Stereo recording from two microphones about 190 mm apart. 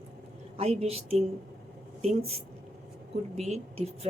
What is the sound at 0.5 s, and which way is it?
A woman's voice, 35° right (ahead or behind).